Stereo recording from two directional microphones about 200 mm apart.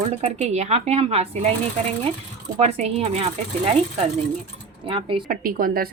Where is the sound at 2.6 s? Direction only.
35° right (ahead or behind).